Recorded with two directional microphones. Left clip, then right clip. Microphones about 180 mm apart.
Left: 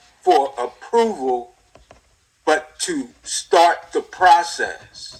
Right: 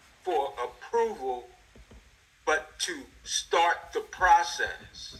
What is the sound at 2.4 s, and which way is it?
Speech, 35° left (ahead or behind).